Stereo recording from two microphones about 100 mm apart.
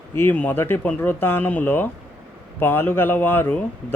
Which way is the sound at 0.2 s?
20° left (ahead or behind).